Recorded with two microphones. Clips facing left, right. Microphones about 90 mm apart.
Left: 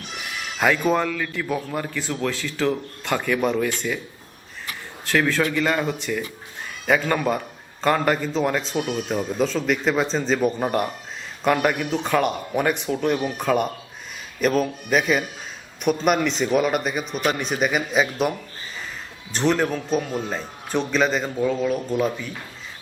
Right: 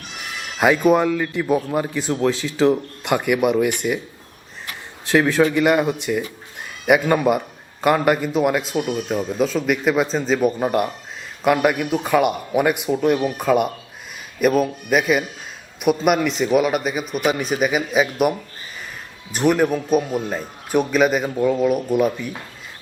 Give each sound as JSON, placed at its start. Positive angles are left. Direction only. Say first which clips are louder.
{"t": 0.6, "sound": "a man's voice", "louder": "right 5 dB", "side_deg": -15}
{"t": 5.0, "sound": "a man's voice", "louder": "right 5 dB", "side_deg": -20}